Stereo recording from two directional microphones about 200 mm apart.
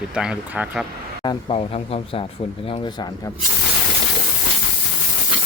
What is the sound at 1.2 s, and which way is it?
Speech, 25° left (ahead or behind).